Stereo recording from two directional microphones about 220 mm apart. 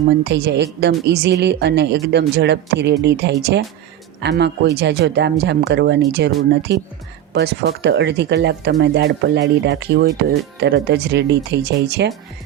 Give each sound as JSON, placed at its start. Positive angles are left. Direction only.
{"t": 0.3, "sound": "a woman's voice", "side_deg": -50}